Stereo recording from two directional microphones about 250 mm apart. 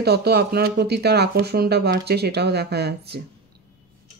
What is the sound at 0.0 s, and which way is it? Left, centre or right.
Speech, right.